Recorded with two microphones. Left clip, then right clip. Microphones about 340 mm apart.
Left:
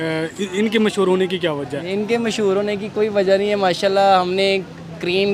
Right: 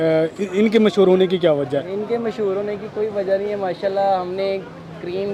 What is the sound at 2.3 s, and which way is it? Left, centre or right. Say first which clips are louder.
Speech: left 3 dB; left.